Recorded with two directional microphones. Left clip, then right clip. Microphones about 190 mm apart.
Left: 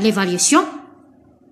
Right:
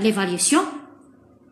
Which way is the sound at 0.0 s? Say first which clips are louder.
Left 4 dB; 30° left (ahead or behind).